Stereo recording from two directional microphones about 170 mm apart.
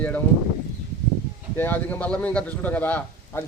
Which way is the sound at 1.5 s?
10° left (ahead or behind).